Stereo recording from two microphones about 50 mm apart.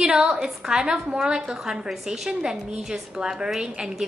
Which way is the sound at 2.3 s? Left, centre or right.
Centre.